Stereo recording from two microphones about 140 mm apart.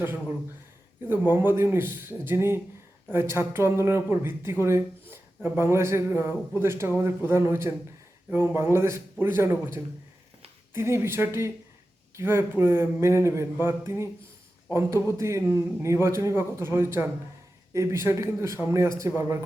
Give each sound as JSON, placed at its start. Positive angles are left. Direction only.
{"t": 0.0, "sound": "a man's voice", "side_deg": -15}